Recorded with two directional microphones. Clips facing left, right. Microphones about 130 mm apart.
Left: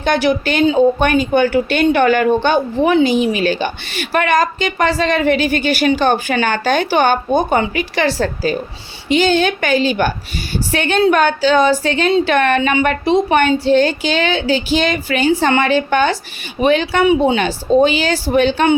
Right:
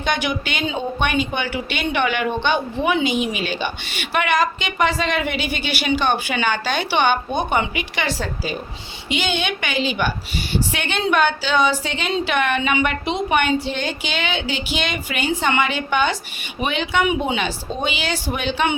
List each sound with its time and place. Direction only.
0.0 s a woman's voice: 40° left (ahead or behind)